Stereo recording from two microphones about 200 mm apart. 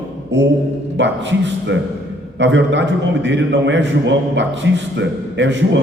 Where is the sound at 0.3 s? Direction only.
60° right (ahead or behind).